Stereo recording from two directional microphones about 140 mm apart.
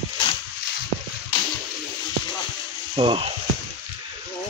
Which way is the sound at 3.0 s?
40° right (ahead or behind).